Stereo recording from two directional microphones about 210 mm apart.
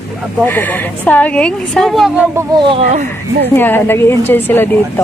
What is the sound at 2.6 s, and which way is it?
Speech, 25° right (ahead or behind).